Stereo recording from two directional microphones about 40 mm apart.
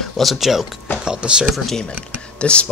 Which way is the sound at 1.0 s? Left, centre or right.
Centre.